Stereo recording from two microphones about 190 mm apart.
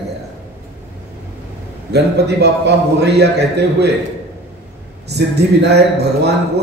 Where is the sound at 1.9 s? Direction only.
60° right (ahead or behind).